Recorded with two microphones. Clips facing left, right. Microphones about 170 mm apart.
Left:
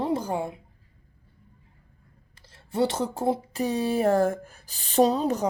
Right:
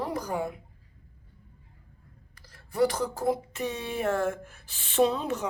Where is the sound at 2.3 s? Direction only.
25° left (ahead or behind).